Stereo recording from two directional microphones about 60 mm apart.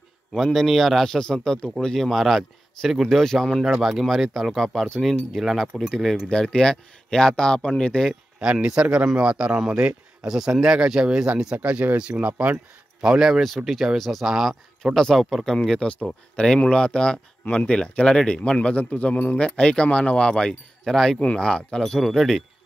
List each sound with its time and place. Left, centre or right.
0.4 s speech: centre
2.0 s speech: centre
8.4 s speech: centre
13.0 s speech: centre
14.2 s speech: centre
15.0 s speech: centre